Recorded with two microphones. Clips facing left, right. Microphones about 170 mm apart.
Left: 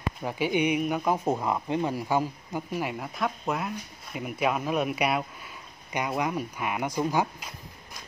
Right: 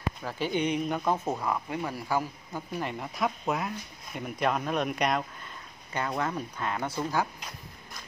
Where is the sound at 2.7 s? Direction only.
5° left (ahead or behind).